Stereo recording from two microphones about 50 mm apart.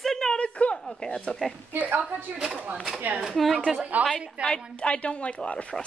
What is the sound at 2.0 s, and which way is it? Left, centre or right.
Speech, right.